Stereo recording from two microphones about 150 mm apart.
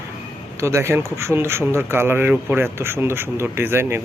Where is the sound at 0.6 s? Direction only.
20° right (ahead or behind).